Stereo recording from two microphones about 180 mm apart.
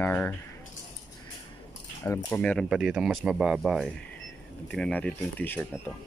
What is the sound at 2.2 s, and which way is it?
Speech, 10° left (ahead or behind).